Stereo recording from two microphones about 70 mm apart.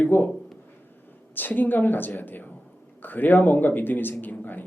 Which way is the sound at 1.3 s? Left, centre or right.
Left.